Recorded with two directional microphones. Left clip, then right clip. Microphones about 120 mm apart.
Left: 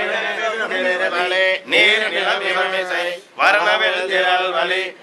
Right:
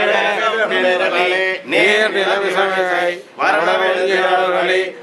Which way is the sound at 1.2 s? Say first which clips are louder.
Right 1 dB; 15° left (ahead or behind).